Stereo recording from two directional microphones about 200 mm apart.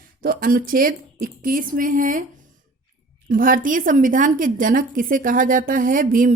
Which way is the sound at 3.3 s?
40° right (ahead or behind).